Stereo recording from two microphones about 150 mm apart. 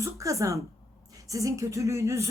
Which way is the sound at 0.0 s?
20° right (ahead or behind).